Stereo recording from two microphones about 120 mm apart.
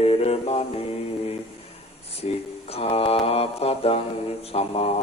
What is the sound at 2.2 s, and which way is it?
Mantra, 55° left (ahead or behind).